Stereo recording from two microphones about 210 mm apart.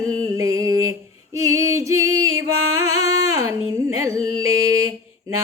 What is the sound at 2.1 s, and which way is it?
Music, 90° right.